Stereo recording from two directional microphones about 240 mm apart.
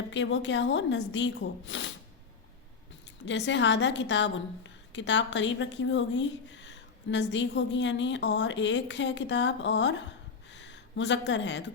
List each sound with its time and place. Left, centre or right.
0.1 s a woman's voice: left
3.2 s a woman's voice: left
10.5 s a sound: left